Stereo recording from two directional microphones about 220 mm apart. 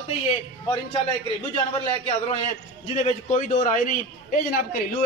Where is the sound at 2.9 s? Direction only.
30° left (ahead or behind).